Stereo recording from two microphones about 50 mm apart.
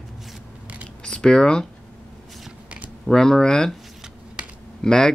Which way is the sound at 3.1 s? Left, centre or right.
Centre.